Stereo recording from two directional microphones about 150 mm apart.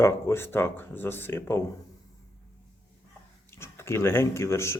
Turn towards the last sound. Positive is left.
turn(degrees=20)  # may be behind; listen again after turning